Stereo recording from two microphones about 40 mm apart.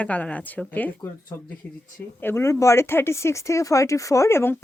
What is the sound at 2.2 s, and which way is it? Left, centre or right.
Speech, left.